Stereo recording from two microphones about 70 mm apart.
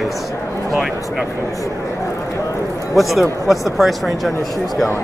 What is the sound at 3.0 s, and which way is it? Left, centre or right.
Speech, centre.